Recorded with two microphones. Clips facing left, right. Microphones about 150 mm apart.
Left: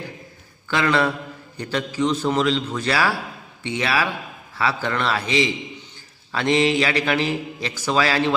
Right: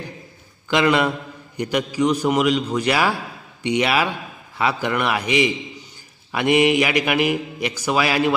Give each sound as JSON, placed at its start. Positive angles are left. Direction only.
{"t": 0.7, "sound": "speech", "side_deg": -15}